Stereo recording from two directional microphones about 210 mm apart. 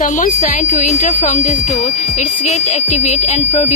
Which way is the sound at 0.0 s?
40° left (ahead or behind).